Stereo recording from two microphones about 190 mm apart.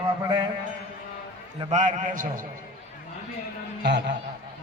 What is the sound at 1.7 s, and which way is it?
Speech, 40° right (ahead or behind).